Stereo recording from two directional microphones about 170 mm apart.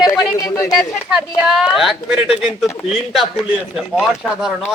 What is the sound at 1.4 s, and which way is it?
A man's voice, centre (ahead or behind).